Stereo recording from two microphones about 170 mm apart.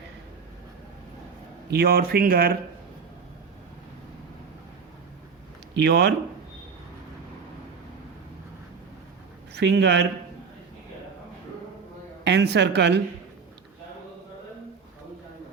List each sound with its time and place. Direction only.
1.7 s speech: 65° right (ahead or behind)
5.7 s speech: 80° right
9.5 s speech: 90° right
12.2 s speech: 90° right